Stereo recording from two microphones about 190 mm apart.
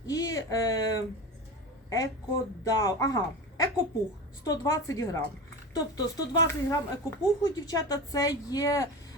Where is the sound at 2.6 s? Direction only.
20° left (ahead or behind).